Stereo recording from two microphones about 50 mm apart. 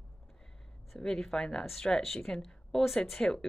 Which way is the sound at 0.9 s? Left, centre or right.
Centre.